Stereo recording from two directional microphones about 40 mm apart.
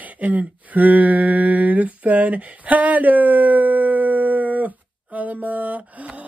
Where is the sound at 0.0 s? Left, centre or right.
Right.